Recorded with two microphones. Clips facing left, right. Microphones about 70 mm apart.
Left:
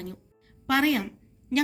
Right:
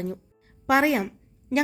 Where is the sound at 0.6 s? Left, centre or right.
Right.